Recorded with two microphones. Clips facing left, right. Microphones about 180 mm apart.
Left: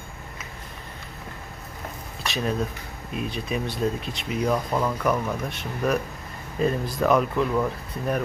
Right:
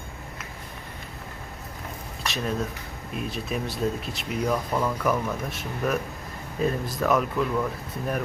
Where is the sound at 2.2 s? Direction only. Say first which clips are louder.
Left 2 dB; centre (ahead or behind).